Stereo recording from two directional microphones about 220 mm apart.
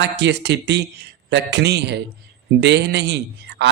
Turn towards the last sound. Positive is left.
turn(degrees=-50)  # may be behind; listen again after turning